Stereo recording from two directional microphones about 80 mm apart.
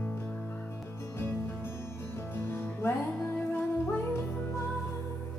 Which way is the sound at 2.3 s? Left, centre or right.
Left.